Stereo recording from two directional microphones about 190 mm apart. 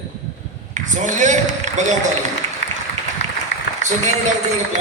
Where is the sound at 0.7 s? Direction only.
40° right (ahead or behind).